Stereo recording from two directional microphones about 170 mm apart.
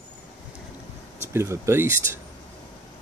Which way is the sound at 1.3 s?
15° right (ahead or behind).